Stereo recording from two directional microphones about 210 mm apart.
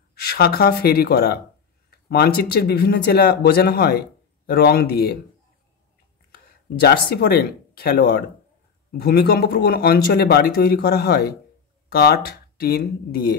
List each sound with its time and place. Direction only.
0.1 s speech: 50° left (ahead or behind)
6.3 s speech: 50° left (ahead or behind)